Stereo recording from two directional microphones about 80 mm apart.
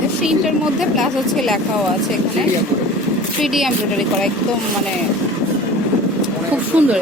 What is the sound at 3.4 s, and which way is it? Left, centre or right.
Speech, centre.